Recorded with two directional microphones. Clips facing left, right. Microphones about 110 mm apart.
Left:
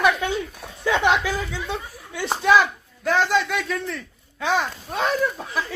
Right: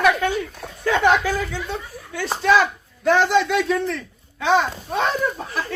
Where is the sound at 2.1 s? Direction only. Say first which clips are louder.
Even; 15° left (ahead or behind).